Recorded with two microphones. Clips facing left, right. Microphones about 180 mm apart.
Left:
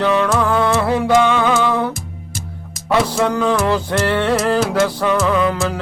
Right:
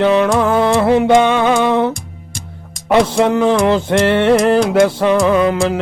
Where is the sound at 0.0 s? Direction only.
25° right (ahead or behind).